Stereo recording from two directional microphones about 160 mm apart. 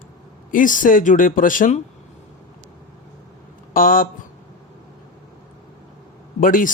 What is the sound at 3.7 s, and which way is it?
Speech, 60° left (ahead or behind).